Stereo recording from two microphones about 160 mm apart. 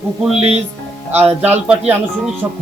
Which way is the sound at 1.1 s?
10° right (ahead or behind).